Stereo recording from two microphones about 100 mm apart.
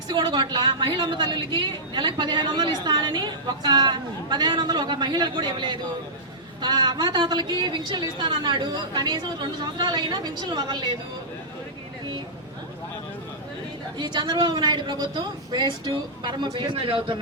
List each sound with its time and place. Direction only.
0.1 s a woman's voice: 45° right (ahead or behind)
14.0 s a woman's voice: 45° right (ahead or behind); by 17.2 s 60° right (ahead or behind)